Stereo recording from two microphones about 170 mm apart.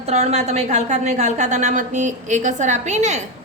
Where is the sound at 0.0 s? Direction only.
40° right (ahead or behind).